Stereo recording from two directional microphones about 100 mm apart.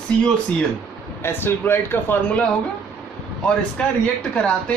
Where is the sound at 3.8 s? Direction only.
10° left (ahead or behind).